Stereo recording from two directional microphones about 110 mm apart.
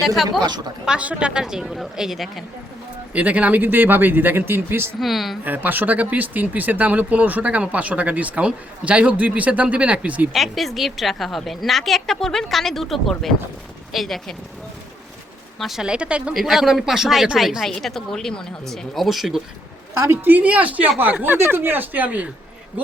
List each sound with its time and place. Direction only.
0.3 s speech: 40° right (ahead or behind)
0.9 s speech: 10° right (ahead or behind)
3.1 s speech: 10° right (ahead or behind)
4.9 s speech: centre (ahead or behind)
5.4 s speech: 15° right (ahead or behind)
10.3 s speech: centre (ahead or behind)
15.5 s speech: centre (ahead or behind)
19.9 s speech: 25° right (ahead or behind)